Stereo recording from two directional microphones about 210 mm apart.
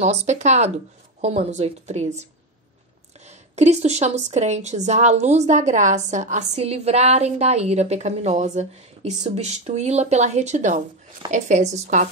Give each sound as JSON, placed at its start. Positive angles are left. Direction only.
{"t": 0.0, "sound": "a woman's voice", "side_deg": -35}
{"t": 3.3, "sound": "a woman's voice", "side_deg": -30}